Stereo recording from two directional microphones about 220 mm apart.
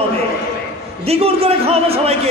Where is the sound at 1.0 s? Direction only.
25° right (ahead or behind).